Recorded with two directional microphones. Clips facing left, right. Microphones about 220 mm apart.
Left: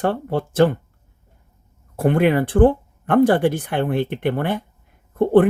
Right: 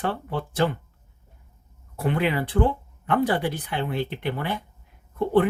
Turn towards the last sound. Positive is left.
turn(degrees=50)  # may be behind; listen again after turning